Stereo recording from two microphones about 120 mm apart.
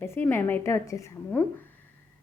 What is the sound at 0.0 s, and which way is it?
A woman's voice, 20° left (ahead or behind).